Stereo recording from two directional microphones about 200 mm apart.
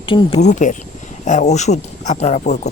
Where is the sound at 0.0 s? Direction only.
25° left (ahead or behind).